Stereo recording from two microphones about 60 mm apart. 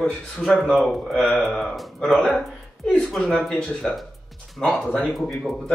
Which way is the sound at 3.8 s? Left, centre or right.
Centre.